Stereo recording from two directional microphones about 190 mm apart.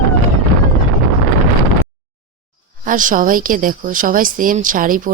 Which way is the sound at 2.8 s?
45° right (ahead or behind).